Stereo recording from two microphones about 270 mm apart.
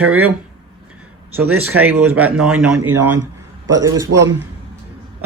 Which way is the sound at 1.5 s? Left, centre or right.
Right.